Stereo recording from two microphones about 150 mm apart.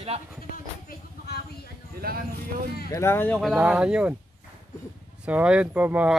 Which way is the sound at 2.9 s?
20° left (ahead or behind).